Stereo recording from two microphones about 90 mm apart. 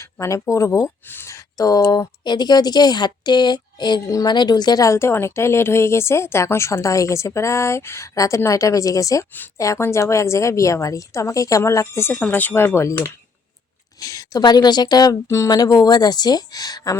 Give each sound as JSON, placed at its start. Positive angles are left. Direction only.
{"t": 0.0, "sound": "speech", "side_deg": 35}
{"t": 1.0, "sound": "speech", "side_deg": 25}
{"t": 1.3, "sound": "speech", "side_deg": 40}